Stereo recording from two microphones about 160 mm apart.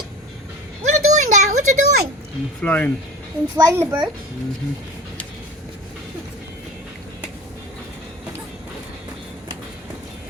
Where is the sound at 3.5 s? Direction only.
15° right (ahead or behind).